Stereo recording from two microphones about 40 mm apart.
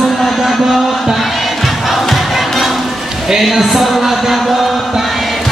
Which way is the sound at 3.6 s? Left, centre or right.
Centre.